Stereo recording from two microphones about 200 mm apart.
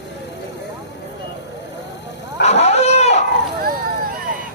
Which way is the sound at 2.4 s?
30° left (ahead or behind).